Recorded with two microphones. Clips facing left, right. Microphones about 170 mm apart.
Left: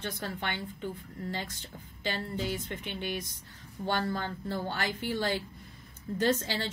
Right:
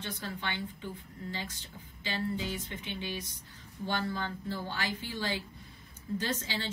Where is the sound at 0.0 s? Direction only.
50° left (ahead or behind).